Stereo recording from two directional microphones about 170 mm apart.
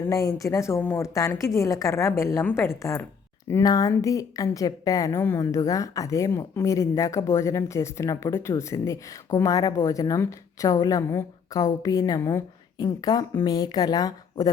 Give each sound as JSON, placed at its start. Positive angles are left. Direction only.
{"t": 0.1, "sound": "a woman's voice", "side_deg": 20}